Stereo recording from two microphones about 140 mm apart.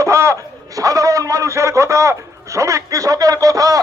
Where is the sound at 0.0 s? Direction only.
20° right (ahead or behind).